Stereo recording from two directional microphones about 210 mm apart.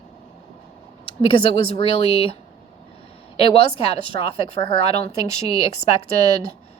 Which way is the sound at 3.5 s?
25° left (ahead or behind).